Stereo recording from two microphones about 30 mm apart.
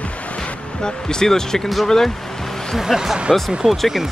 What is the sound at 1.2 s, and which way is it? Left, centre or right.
Speech, centre.